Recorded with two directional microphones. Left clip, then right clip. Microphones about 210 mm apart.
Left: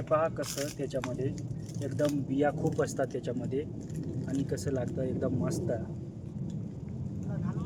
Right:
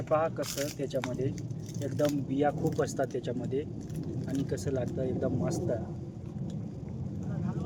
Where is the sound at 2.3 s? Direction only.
5° left (ahead or behind).